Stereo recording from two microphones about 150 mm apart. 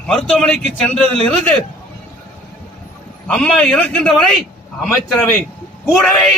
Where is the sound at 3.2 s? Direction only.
5° left (ahead or behind).